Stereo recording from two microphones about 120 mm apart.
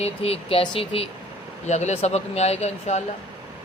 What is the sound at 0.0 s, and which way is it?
A man's voice, 55° left (ahead or behind).